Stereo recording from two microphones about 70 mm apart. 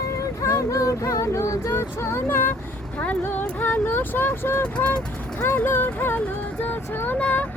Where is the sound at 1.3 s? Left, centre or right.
Left.